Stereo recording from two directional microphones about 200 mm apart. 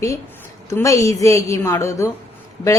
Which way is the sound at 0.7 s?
15° left (ahead or behind).